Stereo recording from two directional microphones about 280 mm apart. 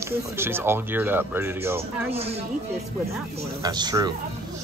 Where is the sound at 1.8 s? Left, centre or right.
Right.